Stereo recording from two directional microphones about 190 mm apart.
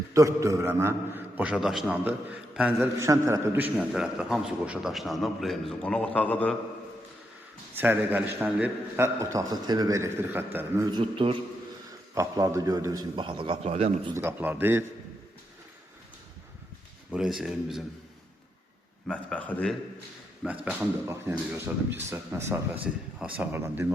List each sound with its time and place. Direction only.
0.1 s a man's voice: 15° right (ahead or behind)
2.7 s a man's voice: 15° right (ahead or behind); by 6.6 s 5° left (ahead or behind)
7.8 s a man's voice: 10° right (ahead or behind)
10.9 s a man's voice: 25° right (ahead or behind)
14.2 s a man's voice: 10° right (ahead or behind)
17.1 s a man's voice: centre (ahead or behind)
19.0 s a man's voice: 5° left (ahead or behind)
20.7 s a man's voice: 15° right (ahead or behind)